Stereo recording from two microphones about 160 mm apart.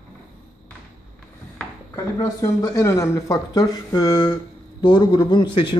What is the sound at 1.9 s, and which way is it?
A man's voice, 20° left (ahead or behind).